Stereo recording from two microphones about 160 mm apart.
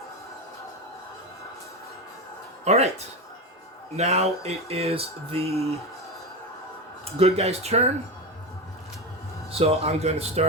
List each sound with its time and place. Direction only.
2.6 s speech: 40° right (ahead or behind)
3.9 s speech: 40° right (ahead or behind)
7.0 s speech: 40° right (ahead or behind)
9.5 s speech: 40° right (ahead or behind)